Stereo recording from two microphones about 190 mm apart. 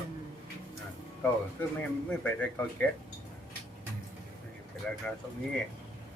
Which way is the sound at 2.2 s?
10° left (ahead or behind).